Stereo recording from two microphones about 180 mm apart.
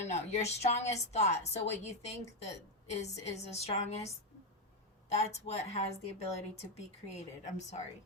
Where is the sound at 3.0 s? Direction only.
35° left (ahead or behind).